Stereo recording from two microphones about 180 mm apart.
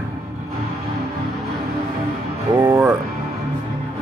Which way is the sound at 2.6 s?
20° right (ahead or behind).